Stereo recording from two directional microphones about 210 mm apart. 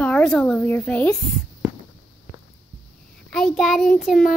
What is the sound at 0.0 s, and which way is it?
Speech, 5° left (ahead or behind).